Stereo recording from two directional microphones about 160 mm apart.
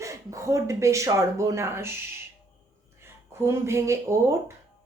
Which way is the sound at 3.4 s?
15° right (ahead or behind).